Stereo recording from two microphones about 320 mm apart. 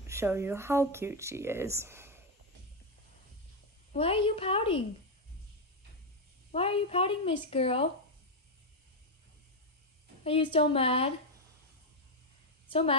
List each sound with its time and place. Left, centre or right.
0.0 s speech: centre
3.9 s a woman's voice: centre
6.5 s a woman's voice: centre
10.2 s a woman's voice: centre
12.6 s a sound: centre